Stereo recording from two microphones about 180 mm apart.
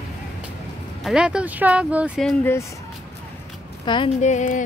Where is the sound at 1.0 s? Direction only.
Centre (ahead or behind).